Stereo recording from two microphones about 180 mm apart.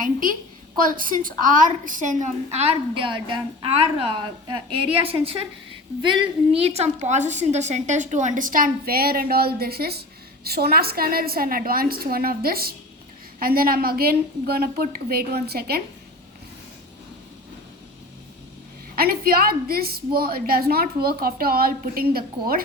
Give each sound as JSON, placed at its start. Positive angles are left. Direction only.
{"t": 0.0, "sound": "a woman's voice", "side_deg": -50}
{"t": 18.9, "sound": "a woman's voice", "side_deg": -55}